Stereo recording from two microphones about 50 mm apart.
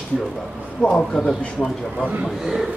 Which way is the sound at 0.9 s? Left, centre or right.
Centre.